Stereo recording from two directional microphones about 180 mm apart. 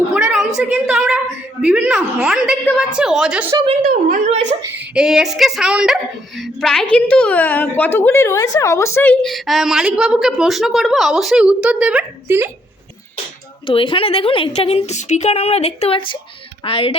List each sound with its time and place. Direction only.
0.1 s a sound: 5° right (ahead or behind)
1.6 s a woman's voice: 5° right (ahead or behind)
3.5 s a woman's voice: 30° right (ahead or behind)
4.8 s speech: 5° right (ahead or behind); by 9.1 s 15° left (ahead or behind)
9.2 s a woman's voice: centre (ahead or behind)
13.7 s a woman's voice: 30° left (ahead or behind)